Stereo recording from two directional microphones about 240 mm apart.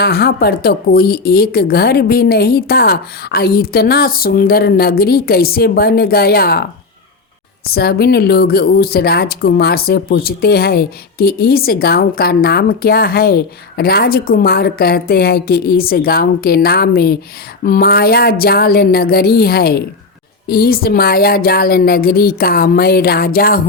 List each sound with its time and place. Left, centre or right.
0.0 s speech: left
7.7 s speech: left